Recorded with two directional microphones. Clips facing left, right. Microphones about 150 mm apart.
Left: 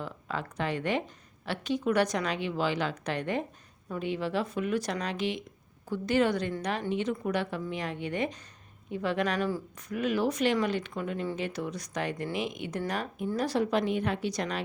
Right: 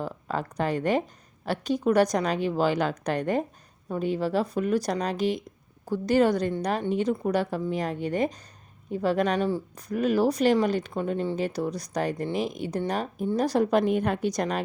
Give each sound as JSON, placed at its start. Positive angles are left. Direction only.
{"t": 0.0, "sound": "a woman's voice", "side_deg": -40}